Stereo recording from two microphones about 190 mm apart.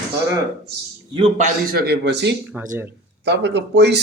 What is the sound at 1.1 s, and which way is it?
A man's voice, 35° right (ahead or behind).